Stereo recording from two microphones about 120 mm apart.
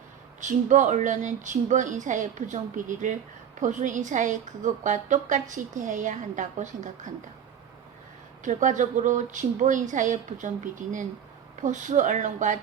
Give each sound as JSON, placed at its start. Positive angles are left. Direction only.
{"t": 0.3, "sound": "a woman's voice", "side_deg": -90}
{"t": 8.4, "sound": "a woman's voice", "side_deg": -90}